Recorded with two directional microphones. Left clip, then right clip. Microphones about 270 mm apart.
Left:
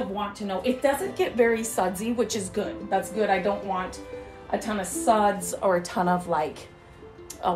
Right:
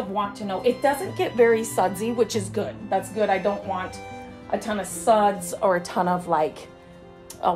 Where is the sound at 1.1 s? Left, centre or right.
Right.